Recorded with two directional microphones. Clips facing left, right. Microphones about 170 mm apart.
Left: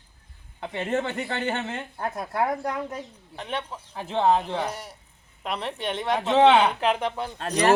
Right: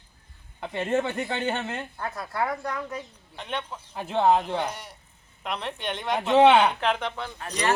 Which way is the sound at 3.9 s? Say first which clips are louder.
Even; 15° right (ahead or behind).